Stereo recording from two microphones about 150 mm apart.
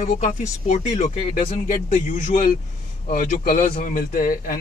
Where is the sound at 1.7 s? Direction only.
60° left (ahead or behind).